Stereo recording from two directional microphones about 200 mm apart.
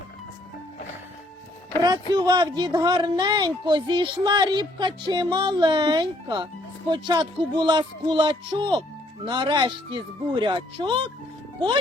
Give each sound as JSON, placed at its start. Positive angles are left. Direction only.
{"t": 1.8, "sound": "speech", "side_deg": -20}